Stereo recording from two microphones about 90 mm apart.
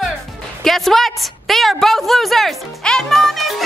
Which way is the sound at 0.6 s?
5° left (ahead or behind).